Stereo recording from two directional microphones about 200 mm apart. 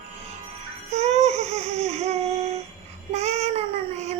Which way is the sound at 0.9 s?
35° right (ahead or behind).